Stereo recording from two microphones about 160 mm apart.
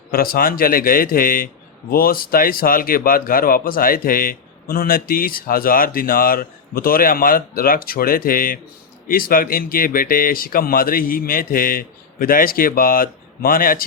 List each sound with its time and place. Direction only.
0.1 s speech: 65° left (ahead or behind)